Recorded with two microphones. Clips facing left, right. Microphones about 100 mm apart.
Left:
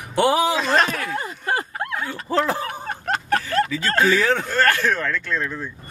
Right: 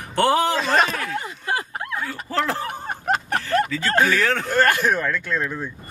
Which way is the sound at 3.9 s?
15° right (ahead or behind).